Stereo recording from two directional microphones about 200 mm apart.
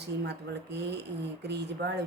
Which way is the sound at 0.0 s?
60° right (ahead or behind).